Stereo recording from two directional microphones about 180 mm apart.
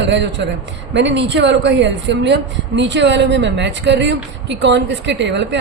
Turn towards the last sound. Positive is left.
turn(degrees=-75)  # may be behind; listen again after turning